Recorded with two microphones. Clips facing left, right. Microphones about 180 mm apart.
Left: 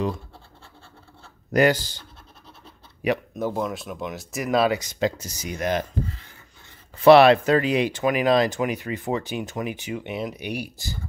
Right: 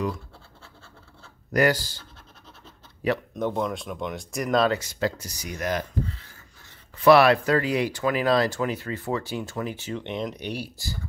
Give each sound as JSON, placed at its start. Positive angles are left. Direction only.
{"t": 1.5, "sound": "speech", "side_deg": 20}
{"t": 3.3, "sound": "speech", "side_deg": 5}
{"t": 7.1, "sound": "speech", "side_deg": 25}